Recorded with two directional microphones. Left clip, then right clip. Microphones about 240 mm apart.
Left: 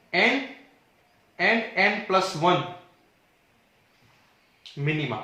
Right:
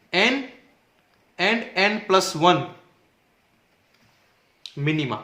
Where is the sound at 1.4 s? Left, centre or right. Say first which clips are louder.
Right 1 dB; right.